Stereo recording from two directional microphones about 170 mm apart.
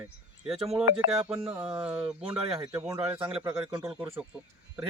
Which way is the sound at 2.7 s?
20° right (ahead or behind).